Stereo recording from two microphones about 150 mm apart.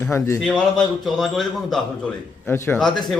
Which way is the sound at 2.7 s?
5° left (ahead or behind).